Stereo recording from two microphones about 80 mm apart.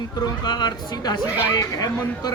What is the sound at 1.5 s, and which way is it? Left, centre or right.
Speech, left.